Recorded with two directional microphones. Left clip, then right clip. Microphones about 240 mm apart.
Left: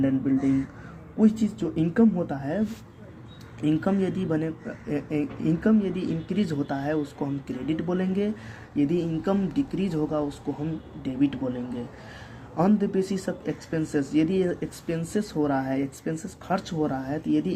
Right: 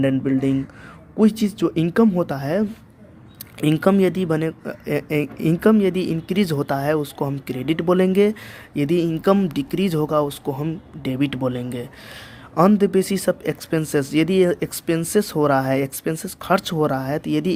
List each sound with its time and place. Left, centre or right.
0.0 s speech: right